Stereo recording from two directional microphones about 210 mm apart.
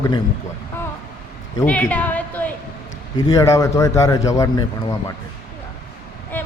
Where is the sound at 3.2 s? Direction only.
15° left (ahead or behind).